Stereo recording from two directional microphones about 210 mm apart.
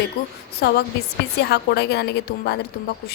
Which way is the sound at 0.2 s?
50° left (ahead or behind).